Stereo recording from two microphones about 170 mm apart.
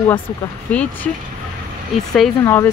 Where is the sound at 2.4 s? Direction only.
15° left (ahead or behind).